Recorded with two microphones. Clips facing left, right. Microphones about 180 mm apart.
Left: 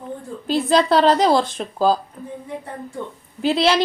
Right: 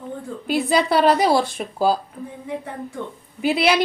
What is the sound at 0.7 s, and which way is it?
Speech, 10° right (ahead or behind).